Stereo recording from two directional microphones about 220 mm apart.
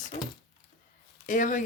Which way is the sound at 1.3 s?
35° left (ahead or behind).